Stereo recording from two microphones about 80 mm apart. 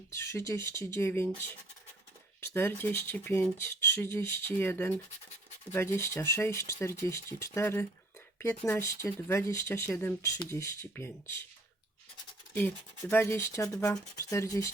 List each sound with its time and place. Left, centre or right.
0.1 s speech: left
2.6 s speech: left
13.1 s speech: left